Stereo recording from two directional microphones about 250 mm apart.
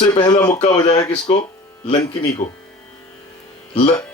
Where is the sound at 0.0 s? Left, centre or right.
Centre.